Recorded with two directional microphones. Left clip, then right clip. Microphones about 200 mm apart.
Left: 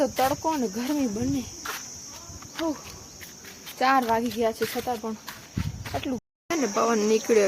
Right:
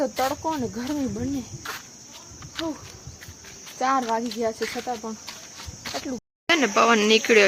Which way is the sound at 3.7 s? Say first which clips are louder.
Left 1 dB; 10° left (ahead or behind).